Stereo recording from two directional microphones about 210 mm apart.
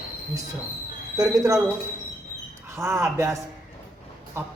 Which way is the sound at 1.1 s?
15° right (ahead or behind).